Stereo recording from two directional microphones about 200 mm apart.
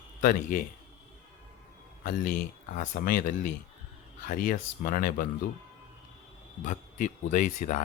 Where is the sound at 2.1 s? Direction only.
45° left (ahead or behind).